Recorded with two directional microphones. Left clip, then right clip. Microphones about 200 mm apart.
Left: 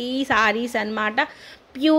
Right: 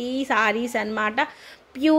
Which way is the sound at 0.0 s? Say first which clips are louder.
Left 2 dB; 5° left (ahead or behind).